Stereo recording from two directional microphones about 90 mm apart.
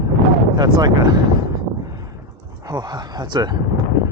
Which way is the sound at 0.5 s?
50° right (ahead or behind).